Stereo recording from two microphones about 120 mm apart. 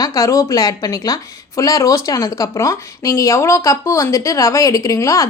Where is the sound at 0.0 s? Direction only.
30° left (ahead or behind).